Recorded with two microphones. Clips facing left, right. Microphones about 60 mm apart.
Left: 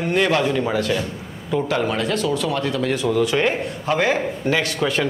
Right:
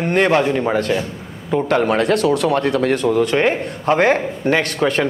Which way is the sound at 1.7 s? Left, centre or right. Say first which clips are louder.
Right 8 dB; right.